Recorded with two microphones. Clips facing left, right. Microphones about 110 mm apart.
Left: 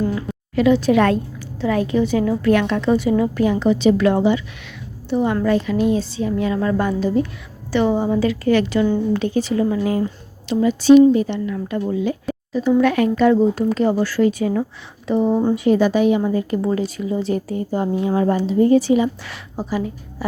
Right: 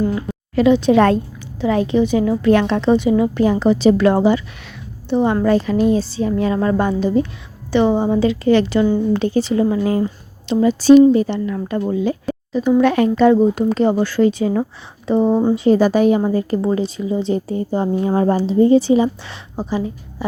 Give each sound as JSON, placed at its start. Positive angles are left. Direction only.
{"t": 0.5, "sound": "speech", "side_deg": -25}
{"t": 3.4, "sound": "a woman's voice", "side_deg": -35}
{"t": 13.4, "sound": "a woman's voice", "side_deg": -20}